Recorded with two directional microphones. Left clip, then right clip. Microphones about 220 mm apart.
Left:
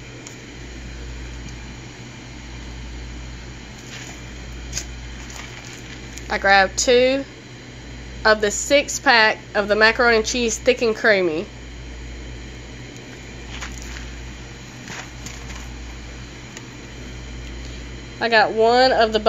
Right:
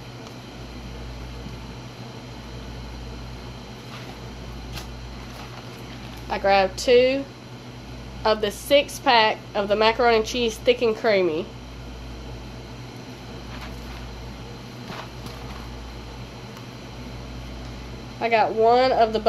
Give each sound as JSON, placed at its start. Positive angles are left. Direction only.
{"t": 6.2, "sound": "a woman's voice", "side_deg": 20}
{"t": 8.2, "sound": "a woman's voice", "side_deg": 20}
{"t": 18.2, "sound": "a woman's voice", "side_deg": 25}